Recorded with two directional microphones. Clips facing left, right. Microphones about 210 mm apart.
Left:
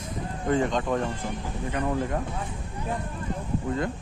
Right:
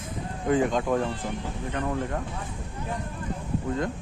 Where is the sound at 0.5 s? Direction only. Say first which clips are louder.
Right 1 dB; 5° right (ahead or behind).